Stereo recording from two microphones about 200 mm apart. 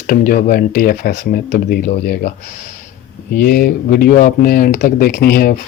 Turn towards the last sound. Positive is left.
turn(degrees=50)  # may be behind; listen again after turning